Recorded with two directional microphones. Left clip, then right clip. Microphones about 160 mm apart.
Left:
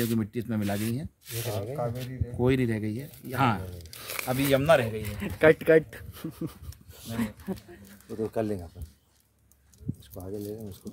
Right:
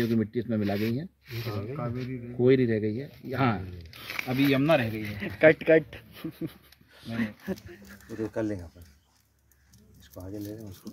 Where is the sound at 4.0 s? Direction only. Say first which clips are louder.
Right 1 dB; 30° left (ahead or behind).